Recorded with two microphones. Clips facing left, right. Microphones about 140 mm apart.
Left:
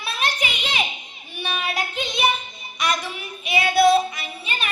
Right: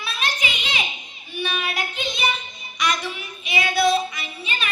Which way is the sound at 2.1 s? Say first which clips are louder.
Left 7 dB; 50° left (ahead or behind).